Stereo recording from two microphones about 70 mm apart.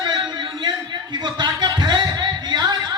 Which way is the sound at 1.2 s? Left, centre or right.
Right.